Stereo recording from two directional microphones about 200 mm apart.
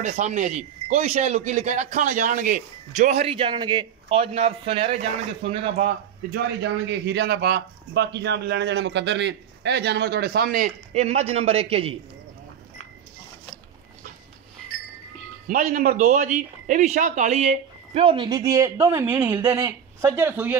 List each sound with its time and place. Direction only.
0.0 s a man's voice: 35° right (ahead or behind)
6.3 s a man's voice: 60° right (ahead or behind); by 12.0 s 30° right (ahead or behind)
15.4 s a man's voice: 45° right (ahead or behind); by 20.5 s 10° right (ahead or behind)